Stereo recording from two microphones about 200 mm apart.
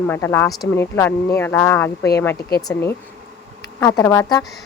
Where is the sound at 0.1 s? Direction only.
10° left (ahead or behind).